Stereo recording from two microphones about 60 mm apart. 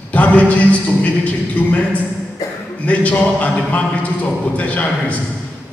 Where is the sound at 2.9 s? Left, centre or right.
Left.